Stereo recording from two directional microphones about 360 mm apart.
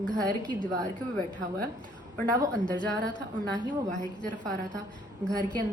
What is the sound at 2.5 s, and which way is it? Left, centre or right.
Speech, centre.